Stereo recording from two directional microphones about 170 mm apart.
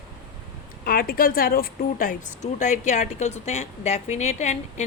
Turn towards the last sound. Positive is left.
turn(degrees=40)  # may be behind; listen again after turning